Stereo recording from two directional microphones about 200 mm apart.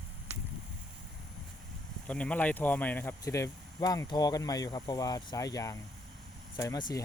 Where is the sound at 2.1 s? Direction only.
5° left (ahead or behind).